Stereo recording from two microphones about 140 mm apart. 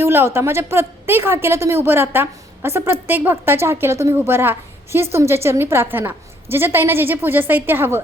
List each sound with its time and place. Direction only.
0.0 s a woman's voice: 15° right (ahead or behind)